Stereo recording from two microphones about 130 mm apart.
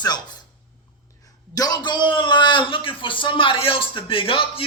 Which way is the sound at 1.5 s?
30° left (ahead or behind).